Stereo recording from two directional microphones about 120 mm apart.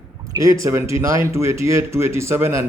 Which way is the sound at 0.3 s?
25° right (ahead or behind).